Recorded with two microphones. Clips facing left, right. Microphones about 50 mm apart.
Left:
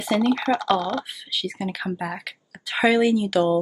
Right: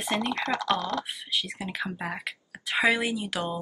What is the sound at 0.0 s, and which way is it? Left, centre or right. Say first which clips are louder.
Speech: left 7 dB; right.